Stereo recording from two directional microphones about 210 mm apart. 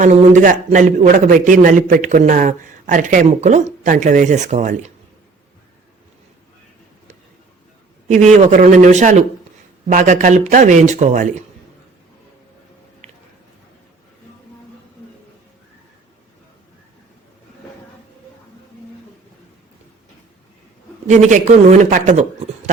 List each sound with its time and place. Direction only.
0.0 s a man's voice: 35° right (ahead or behind)
8.0 s a man's voice: 35° right (ahead or behind)
21.1 s a man's voice: 35° right (ahead or behind)